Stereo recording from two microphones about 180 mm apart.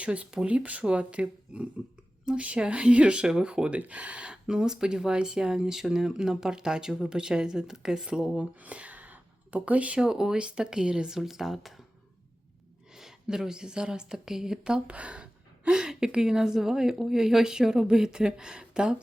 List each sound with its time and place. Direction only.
0.0 s speech: 5° right (ahead or behind)
12.9 s speech: centre (ahead or behind)